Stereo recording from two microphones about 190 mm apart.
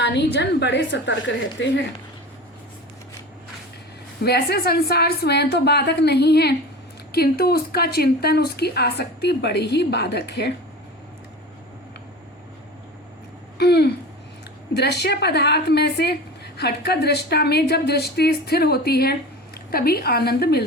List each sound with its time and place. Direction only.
0.0 s a woman's voice: 65° left (ahead or behind)
4.2 s a woman's voice: 55° left (ahead or behind)
13.6 s a woman's voice: 60° left (ahead or behind)